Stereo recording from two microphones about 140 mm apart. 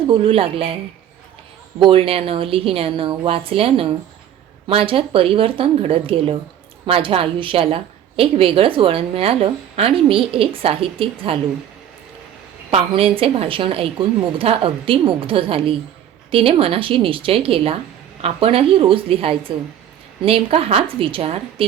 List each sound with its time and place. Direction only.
0.1 s a woman's voice: 40° right (ahead or behind)
1.8 s a woman's voice: 40° right (ahead or behind)
12.7 s a woman's voice: 40° right (ahead or behind)